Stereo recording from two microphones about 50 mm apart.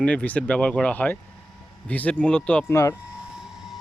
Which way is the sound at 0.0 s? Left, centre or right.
Left.